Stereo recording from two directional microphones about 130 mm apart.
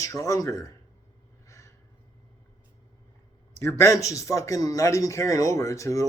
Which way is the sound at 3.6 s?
20° left (ahead or behind).